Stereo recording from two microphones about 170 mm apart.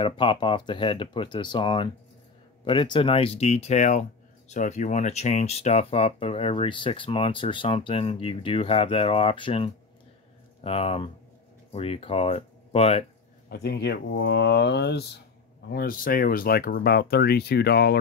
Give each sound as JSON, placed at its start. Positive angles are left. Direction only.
{"t": 0.0, "sound": "speech", "side_deg": 30}
{"t": 13.5, "sound": "speech", "side_deg": 70}
{"t": 15.7, "sound": "speech", "side_deg": 60}